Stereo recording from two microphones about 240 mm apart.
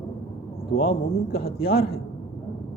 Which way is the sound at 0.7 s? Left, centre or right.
Left.